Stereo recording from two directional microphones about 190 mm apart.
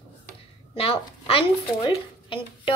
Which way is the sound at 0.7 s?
30° left (ahead or behind).